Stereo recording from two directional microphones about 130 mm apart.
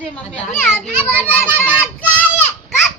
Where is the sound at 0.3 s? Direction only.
15° left (ahead or behind).